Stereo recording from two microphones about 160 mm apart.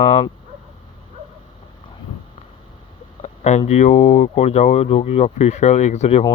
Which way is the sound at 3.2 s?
45° left (ahead or behind).